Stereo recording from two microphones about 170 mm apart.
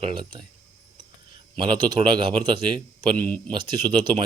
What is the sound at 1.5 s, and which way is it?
A man's voice, 30° right (ahead or behind).